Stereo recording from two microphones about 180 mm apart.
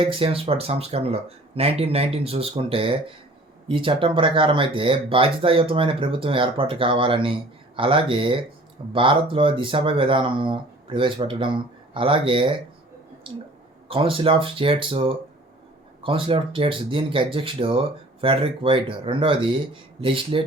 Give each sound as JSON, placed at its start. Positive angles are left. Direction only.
{"t": 0.0, "sound": "speech", "side_deg": -30}
{"t": 13.8, "sound": "speech", "side_deg": -30}